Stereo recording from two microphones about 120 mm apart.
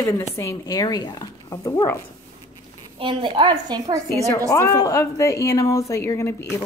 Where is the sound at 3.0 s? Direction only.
45° right (ahead or behind).